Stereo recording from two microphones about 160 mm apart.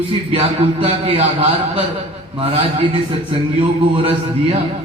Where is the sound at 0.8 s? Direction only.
40° right (ahead or behind).